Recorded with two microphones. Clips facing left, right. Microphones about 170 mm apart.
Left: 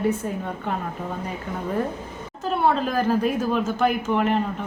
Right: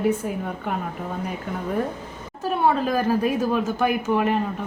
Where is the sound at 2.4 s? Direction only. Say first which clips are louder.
Right 1 dB; 10° right (ahead or behind).